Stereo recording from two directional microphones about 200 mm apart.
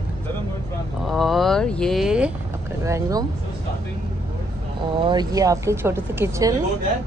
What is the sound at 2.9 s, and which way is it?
Speech, 15° right (ahead or behind).